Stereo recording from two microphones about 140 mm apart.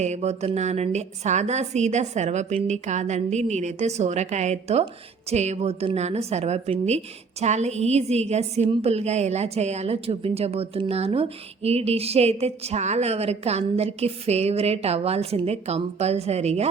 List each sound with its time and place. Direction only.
0.0 s a woman's voice: 55° right (ahead or behind)